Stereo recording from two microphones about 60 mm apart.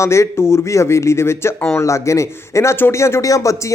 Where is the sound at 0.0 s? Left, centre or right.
Left.